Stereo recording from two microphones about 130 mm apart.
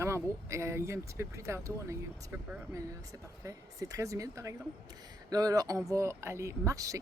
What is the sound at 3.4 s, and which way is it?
Speech, 25° right (ahead or behind).